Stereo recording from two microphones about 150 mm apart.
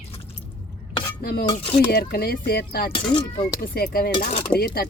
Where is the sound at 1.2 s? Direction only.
90° left.